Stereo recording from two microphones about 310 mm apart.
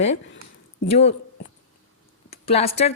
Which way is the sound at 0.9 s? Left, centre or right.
Left.